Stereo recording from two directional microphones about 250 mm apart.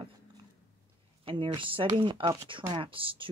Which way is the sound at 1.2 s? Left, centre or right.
Centre.